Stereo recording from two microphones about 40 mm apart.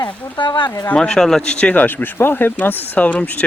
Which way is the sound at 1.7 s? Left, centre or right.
Left.